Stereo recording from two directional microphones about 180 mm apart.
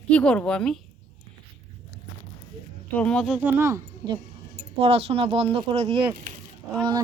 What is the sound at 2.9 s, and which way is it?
Speech, 5° left (ahead or behind).